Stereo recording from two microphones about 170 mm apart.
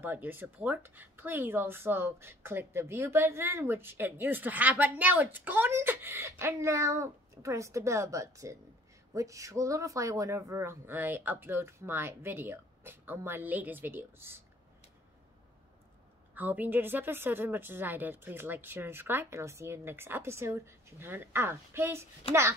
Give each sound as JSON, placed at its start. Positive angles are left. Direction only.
{"t": 0.0, "sound": "speech", "side_deg": -10}
{"t": 16.3, "sound": "speech", "side_deg": -10}
{"t": 22.2, "sound": "speech", "side_deg": 35}